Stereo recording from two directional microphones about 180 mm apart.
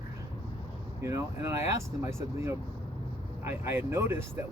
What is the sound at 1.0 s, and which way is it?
Speech, 15° right (ahead or behind).